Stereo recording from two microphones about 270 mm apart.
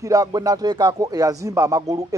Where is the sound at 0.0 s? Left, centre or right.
Centre.